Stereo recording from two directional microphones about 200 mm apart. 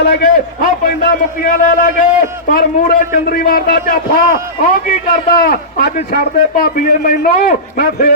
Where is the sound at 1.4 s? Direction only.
40° left (ahead or behind).